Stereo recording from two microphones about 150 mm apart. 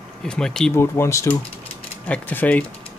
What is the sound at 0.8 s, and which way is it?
Speech, 20° left (ahead or behind).